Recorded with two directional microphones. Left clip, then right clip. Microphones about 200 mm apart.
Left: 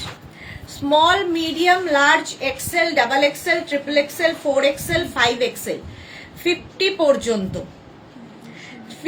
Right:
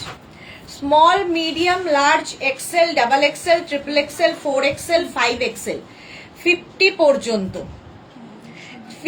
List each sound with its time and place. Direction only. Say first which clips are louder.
0.9 s a woman's voice: right 2 dB; 20° left (ahead or behind)